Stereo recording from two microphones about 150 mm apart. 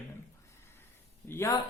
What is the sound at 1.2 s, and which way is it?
Speech, 15° left (ahead or behind).